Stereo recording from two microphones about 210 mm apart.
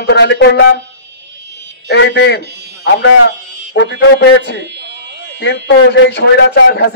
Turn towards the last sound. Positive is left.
turn(degrees=55)  # may be behind; listen again after turning